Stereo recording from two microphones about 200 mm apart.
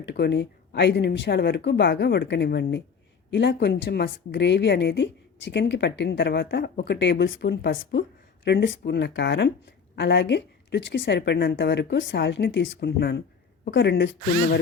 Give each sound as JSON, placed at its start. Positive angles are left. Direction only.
{"t": 0.0, "sound": "a woman's voice", "side_deg": 60}